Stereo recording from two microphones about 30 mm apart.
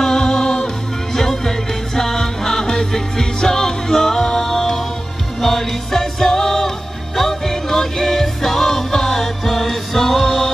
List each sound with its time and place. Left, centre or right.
0.0 s music: centre
9.4 s music: centre
10.2 s music: centre